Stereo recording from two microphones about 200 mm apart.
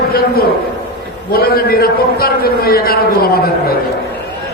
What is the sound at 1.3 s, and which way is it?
A man's voice, 50° left (ahead or behind).